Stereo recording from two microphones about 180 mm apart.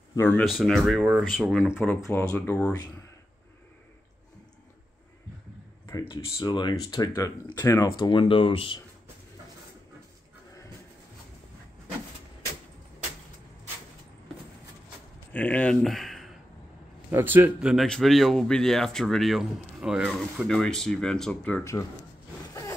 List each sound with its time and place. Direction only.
0.1 s speech: 15° left (ahead or behind)
0.5 s speech: centre (ahead or behind)
6.0 s speech: 25° left (ahead or behind)
15.3 s speech: 10° left (ahead or behind)
17.1 s speech: 10° right (ahead or behind); by 21.8 s 10° left (ahead or behind)
22.5 s zipper: 20° left (ahead or behind)